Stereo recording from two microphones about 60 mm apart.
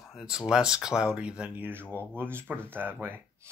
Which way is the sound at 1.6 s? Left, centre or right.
Right.